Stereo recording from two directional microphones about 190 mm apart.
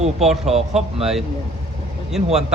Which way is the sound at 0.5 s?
35° right (ahead or behind).